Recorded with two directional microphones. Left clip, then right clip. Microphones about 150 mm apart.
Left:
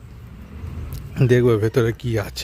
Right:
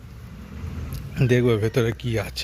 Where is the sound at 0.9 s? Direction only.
50° left (ahead or behind).